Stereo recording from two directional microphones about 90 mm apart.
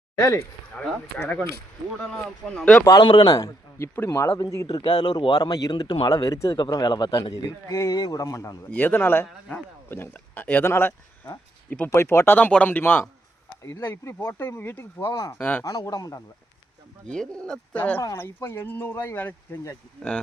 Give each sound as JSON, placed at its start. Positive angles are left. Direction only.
{"t": 0.8, "sound": "speech", "side_deg": 10}
{"t": 2.0, "sound": "speech", "side_deg": 5}
{"t": 3.0, "sound": "speech", "side_deg": 55}
{"t": 3.9, "sound": "a man's voice", "side_deg": 30}
{"t": 4.8, "sound": "speech", "side_deg": 55}
{"t": 6.5, "sound": "speech", "side_deg": 50}
{"t": 7.3, "sound": "a man's voice", "side_deg": 40}
{"t": 8.7, "sound": "speech", "side_deg": 20}
{"t": 11.9, "sound": "a man's voice", "side_deg": 30}
{"t": 14.2, "sound": "speech", "side_deg": 20}
{"t": 15.6, "sound": "a man's voice", "side_deg": 40}
{"t": 17.1, "sound": "speech", "side_deg": 10}